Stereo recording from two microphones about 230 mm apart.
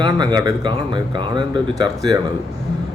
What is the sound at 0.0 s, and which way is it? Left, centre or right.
Speech, centre.